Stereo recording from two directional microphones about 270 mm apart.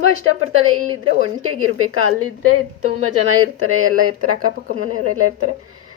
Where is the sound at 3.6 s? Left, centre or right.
Right.